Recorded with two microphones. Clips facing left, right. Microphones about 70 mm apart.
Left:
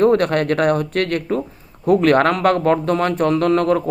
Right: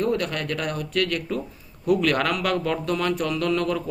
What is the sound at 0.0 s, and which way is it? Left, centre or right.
A man's voice, left.